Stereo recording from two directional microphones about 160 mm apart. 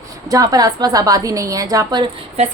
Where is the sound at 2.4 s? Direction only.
40° right (ahead or behind).